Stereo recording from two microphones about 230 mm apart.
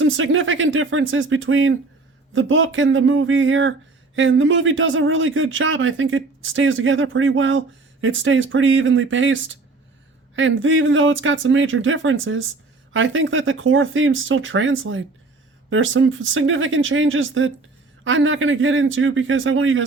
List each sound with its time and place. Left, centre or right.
0.0 s speech: right